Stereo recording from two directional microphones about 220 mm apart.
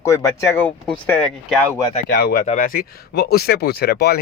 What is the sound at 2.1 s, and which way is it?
Speech, 45° left (ahead or behind).